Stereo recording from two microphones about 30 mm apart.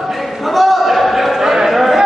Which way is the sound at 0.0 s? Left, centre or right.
Centre.